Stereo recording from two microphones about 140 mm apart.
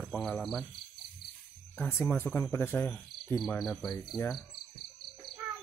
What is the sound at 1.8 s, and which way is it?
Speech, 15° left (ahead or behind).